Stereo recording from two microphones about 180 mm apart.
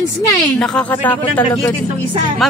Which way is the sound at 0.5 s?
5° left (ahead or behind).